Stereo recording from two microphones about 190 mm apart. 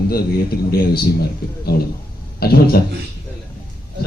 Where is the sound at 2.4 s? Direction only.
55° left (ahead or behind).